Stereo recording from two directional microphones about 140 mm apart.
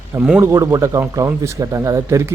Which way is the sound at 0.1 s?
10° right (ahead or behind).